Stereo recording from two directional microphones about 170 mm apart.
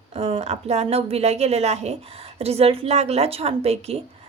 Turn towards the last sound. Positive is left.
turn(degrees=-35)  # may be behind; listen again after turning